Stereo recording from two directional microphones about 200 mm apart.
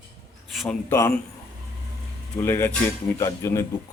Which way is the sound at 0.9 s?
15° left (ahead or behind).